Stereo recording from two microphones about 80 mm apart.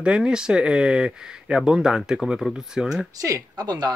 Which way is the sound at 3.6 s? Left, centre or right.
Right.